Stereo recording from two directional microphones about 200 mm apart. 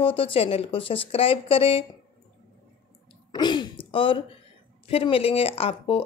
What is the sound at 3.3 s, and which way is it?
Speech, 20° left (ahead or behind).